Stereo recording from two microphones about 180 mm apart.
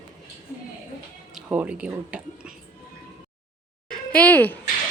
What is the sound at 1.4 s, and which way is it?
Speech, 5° right (ahead or behind).